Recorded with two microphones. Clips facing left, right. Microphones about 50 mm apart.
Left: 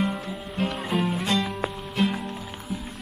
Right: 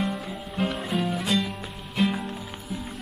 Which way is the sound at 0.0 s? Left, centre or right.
Centre.